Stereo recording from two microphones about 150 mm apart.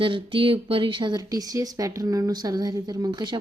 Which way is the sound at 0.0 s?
35° right (ahead or behind).